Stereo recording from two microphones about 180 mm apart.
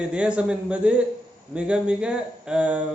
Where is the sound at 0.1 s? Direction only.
5° right (ahead or behind).